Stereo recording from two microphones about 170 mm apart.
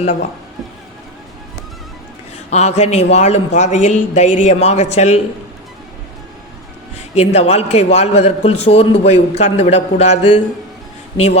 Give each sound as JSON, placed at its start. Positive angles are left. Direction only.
{"t": 2.5, "sound": "a man's voice", "side_deg": 40}
{"t": 6.9, "sound": "a man's voice", "side_deg": 40}